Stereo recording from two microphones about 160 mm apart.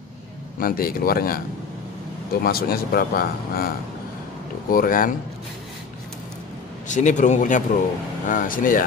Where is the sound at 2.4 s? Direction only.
70° left (ahead or behind).